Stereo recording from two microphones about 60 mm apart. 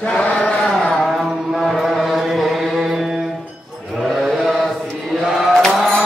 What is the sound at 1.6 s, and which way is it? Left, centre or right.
Mantra, centre.